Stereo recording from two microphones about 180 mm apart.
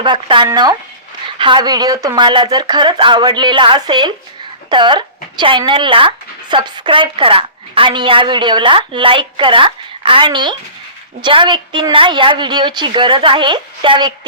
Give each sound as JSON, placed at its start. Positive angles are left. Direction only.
{"t": 0.0, "sound": "speech", "side_deg": -25}